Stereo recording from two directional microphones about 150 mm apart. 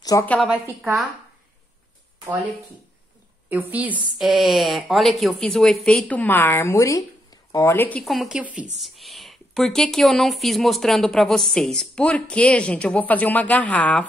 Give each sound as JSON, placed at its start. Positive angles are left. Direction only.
{"t": 0.2, "sound": "speech", "side_deg": 10}
{"t": 0.5, "sound": "a woman's voice", "side_deg": -15}
{"t": 3.4, "sound": "a woman's voice", "side_deg": -10}
{"t": 8.0, "sound": "speech", "side_deg": 0}